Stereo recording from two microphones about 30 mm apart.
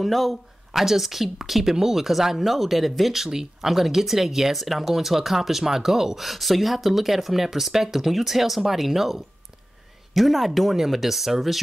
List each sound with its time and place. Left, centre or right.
0.0 s speech: centre
3.2 s speech: centre